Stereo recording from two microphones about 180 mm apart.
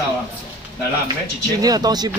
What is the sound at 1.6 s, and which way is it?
Speech, 20° right (ahead or behind).